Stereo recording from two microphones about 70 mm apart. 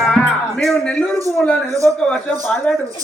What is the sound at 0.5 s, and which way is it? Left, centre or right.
Speech, centre.